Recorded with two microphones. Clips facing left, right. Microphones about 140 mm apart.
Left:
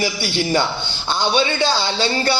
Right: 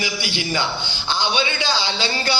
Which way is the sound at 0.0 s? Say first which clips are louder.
Left 5 dB; 35° left (ahead or behind).